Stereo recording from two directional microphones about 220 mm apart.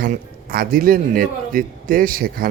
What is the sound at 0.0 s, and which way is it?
A man's voice, 40° right (ahead or behind).